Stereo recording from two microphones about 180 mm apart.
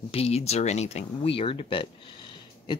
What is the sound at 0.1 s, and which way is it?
Speech, 35° left (ahead or behind).